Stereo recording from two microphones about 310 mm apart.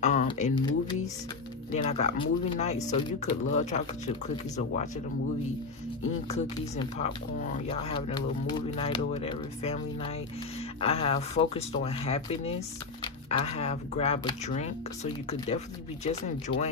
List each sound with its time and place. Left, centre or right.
0.0 s speech: left
6.2 s speech: centre